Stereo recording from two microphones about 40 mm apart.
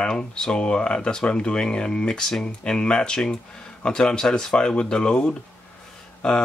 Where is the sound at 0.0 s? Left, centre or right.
Left.